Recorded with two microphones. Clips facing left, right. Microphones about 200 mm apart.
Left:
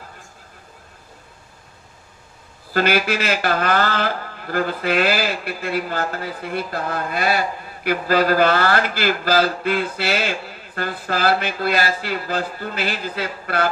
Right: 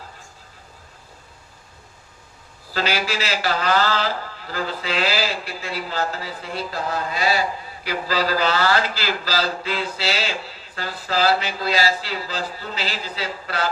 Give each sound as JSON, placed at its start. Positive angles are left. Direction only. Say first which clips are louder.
{"t": 2.7, "sound": "a man's voice", "louder": "left 5 dB", "side_deg": 55}